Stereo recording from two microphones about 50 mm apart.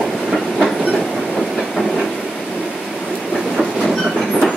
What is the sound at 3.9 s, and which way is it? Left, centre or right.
Train, left.